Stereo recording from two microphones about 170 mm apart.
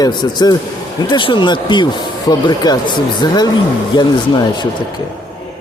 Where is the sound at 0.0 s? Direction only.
25° left (ahead or behind).